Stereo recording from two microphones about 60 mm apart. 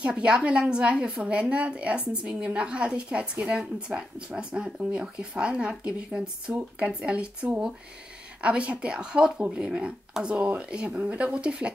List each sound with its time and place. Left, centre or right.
0.0 s a woman's voice: centre
8.4 s a woman's voice: centre